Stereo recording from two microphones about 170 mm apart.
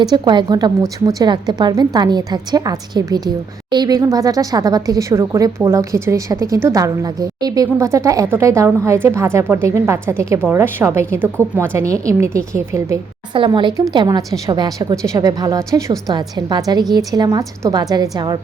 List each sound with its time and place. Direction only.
0.0 s a woman's voice: 25° right (ahead or behind)
13.3 s a woman's voice: 30° right (ahead or behind)